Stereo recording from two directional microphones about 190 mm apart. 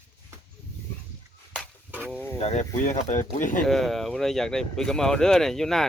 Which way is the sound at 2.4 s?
35° left (ahead or behind).